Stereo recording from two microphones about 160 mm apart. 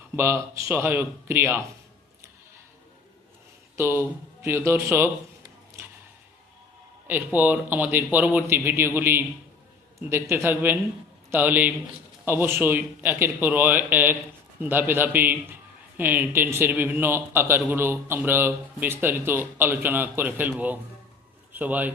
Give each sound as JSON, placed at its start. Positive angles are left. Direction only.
{"t": 0.2, "sound": "speech", "side_deg": -15}
{"t": 3.8, "sound": "speech", "side_deg": -15}
{"t": 7.3, "sound": "a man's voice", "side_deg": -10}